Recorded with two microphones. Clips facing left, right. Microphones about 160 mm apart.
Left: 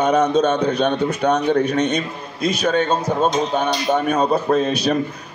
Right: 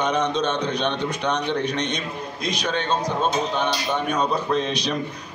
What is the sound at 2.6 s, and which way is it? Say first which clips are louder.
A man's voice: left 5 dB; 50° left (ahead or behind).